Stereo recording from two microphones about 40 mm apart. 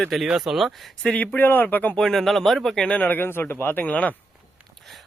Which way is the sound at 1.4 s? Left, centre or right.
Left.